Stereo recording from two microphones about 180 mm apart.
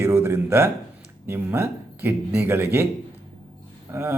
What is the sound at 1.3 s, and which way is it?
Speech, 15° right (ahead or behind).